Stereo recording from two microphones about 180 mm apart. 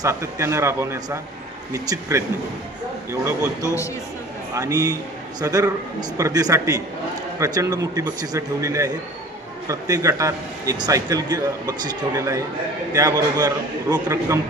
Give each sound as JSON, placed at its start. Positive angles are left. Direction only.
{"t": 0.0, "sound": "a man's voice", "side_deg": -15}